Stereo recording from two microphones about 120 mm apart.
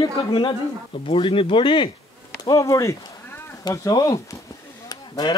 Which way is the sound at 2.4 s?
25° left (ahead or behind).